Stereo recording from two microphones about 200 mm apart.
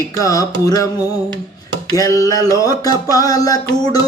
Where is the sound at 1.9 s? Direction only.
15° left (ahead or behind).